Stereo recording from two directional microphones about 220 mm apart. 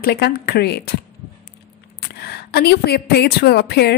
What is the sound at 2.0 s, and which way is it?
A woman's voice, 45° left (ahead or behind).